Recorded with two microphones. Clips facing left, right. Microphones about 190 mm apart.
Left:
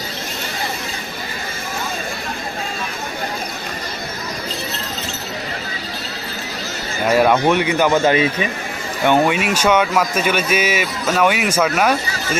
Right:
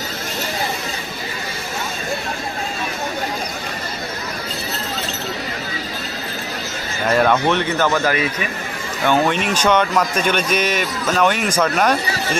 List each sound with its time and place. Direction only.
7.1 s speech: 10° left (ahead or behind)
8.0 s speech: 25° left (ahead or behind)
9.0 s speech: 15° left (ahead or behind)